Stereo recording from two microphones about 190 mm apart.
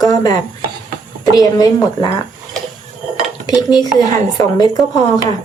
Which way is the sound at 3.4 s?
20° left (ahead or behind).